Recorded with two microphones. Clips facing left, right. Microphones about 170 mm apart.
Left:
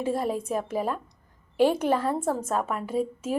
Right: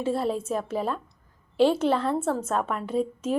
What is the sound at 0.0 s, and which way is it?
A woman's voice, 15° left (ahead or behind).